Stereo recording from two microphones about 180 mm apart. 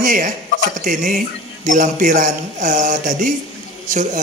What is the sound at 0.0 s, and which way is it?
Speech, 45° right (ahead or behind).